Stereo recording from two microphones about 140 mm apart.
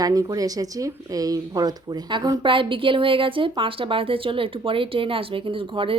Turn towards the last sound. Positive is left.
turn(degrees=-40)  # may be behind; listen again after turning